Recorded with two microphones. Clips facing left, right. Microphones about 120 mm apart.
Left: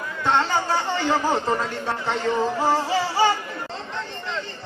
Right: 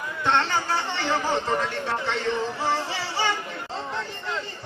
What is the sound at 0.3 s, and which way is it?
Speech, 10° left (ahead or behind).